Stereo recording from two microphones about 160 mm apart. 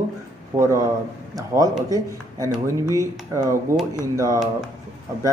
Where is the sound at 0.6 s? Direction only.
20° right (ahead or behind).